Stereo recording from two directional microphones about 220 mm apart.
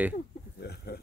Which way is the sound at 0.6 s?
50° left (ahead or behind).